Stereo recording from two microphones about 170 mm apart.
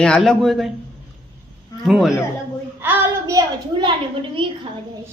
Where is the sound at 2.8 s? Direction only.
15° right (ahead or behind).